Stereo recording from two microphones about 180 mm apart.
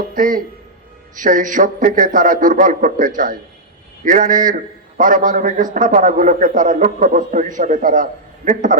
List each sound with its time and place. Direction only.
0.1 s a man's voice: 50° right (ahead or behind)